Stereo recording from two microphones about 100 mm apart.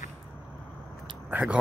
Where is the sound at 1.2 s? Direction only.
15° right (ahead or behind).